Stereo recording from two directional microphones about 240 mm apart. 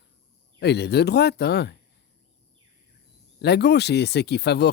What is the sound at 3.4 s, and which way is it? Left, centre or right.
Speech, left.